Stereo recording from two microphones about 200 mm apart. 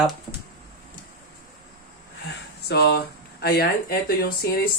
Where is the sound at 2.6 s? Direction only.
55° left (ahead or behind).